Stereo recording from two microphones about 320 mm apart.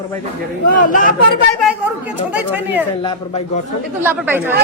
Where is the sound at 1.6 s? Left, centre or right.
Centre.